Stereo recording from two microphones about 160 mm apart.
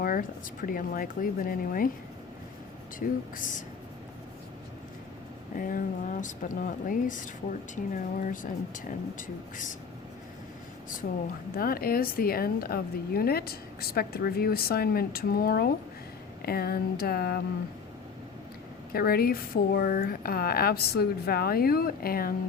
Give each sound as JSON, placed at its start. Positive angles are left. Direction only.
{"t": 0.0, "sound": "speech", "side_deg": 60}
{"t": 3.0, "sound": "speech", "side_deg": 60}
{"t": 5.5, "sound": "speech", "side_deg": 60}
{"t": 8.3, "sound": "speech", "side_deg": 55}
{"t": 11.5, "sound": "a woman's voice", "side_deg": 65}
{"t": 18.9, "sound": "a woman's voice", "side_deg": 70}